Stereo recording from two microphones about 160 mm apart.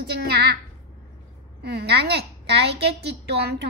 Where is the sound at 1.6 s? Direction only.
90° right.